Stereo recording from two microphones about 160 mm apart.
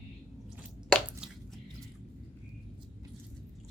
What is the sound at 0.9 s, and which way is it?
Squish, 5° right (ahead or behind).